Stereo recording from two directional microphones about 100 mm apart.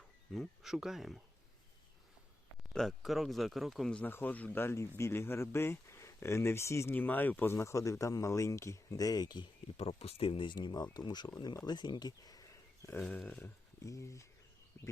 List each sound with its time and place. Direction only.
0.3 s speech: 5° right (ahead or behind)
2.7 s speech: centre (ahead or behind)
3.9 s speech: 20° left (ahead or behind)
6.9 s speech: 15° left (ahead or behind); by 9.5 s 45° left (ahead or behind)
9.7 s speech: 80° left; by 12.9 s 35° left (ahead or behind)
12.9 s speech: 15° left (ahead or behind)
13.4 s speech: 30° left (ahead or behind)